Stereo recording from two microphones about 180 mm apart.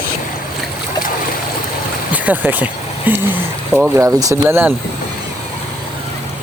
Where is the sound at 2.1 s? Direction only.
10° right (ahead or behind).